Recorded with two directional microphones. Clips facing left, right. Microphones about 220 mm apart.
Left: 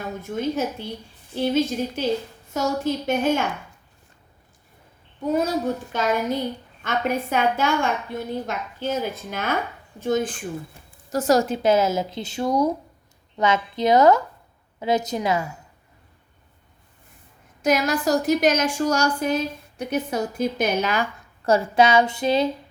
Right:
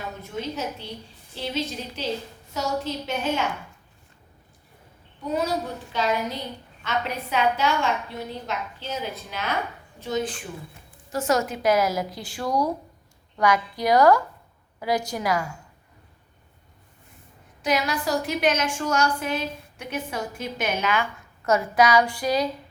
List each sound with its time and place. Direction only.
0.2 s a woman's voice: 50° left (ahead or behind)
5.3 s a woman's voice: 45° left (ahead or behind)
11.1 s speech: 35° left (ahead or behind)
17.6 s a woman's voice: 45° left (ahead or behind); by 22.4 s 25° left (ahead or behind)